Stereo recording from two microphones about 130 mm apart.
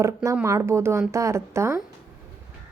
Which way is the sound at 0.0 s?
25° right (ahead or behind).